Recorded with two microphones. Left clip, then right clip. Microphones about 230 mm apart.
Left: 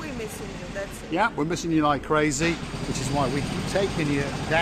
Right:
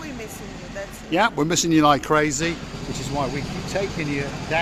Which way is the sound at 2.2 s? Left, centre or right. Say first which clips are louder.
Right 1 dB; centre.